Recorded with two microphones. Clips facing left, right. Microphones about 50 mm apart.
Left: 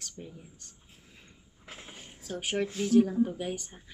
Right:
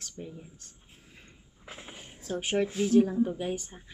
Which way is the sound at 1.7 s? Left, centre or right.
Centre.